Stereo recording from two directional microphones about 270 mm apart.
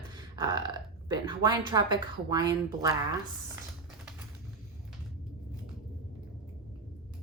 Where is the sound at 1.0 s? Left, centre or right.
Centre.